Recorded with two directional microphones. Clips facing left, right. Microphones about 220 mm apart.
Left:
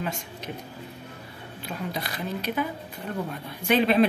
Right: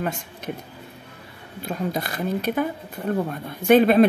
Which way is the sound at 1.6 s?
45° right (ahead or behind).